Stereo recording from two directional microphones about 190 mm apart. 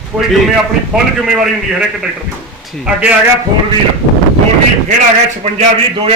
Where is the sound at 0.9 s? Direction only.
5° right (ahead or behind).